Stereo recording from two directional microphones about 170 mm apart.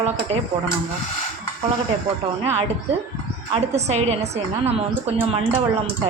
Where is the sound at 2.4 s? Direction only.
35° right (ahead or behind).